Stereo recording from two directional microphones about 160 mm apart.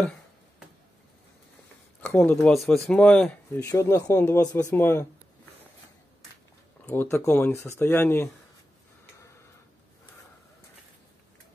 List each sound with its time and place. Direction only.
2.0 s speech: 10° left (ahead or behind)
3.5 s speech: 20° left (ahead or behind)
6.9 s speech: 15° left (ahead or behind)